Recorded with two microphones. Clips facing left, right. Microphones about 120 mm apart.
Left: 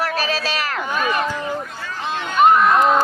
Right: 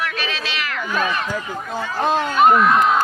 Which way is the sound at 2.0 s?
45° right (ahead or behind).